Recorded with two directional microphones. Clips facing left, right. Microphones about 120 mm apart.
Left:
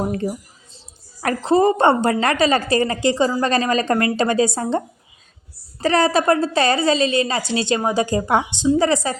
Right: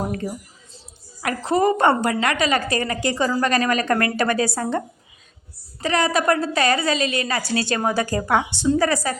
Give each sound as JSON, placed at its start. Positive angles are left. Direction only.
{"t": 1.2, "sound": "a woman's voice", "side_deg": 35}
{"t": 5.8, "sound": "a woman's voice", "side_deg": 35}